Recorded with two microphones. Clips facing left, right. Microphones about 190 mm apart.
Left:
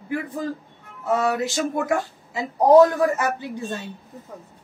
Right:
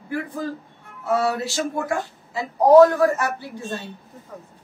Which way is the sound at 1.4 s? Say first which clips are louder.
Left 2 dB; 20° left (ahead or behind).